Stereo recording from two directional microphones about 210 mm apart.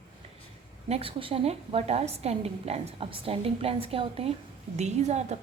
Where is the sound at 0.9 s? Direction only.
30° right (ahead or behind).